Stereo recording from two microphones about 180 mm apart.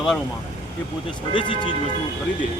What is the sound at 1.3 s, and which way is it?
Speech, 25° left (ahead or behind).